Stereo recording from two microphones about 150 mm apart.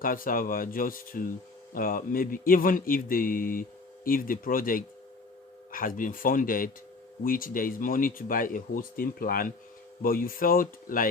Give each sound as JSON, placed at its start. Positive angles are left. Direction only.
{"t": 0.0, "sound": "a man's voice", "side_deg": 70}